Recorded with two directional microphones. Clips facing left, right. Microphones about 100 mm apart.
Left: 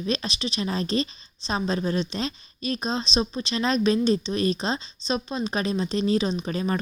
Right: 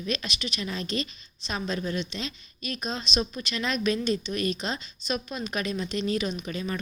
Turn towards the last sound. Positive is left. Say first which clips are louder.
# left 6 dB
turn(degrees=35)  # may be behind; listen again after turning